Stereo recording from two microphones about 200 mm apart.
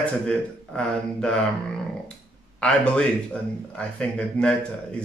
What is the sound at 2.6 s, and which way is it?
Speech, 5° left (ahead or behind).